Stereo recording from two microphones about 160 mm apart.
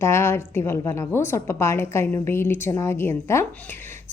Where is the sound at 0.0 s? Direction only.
15° left (ahead or behind).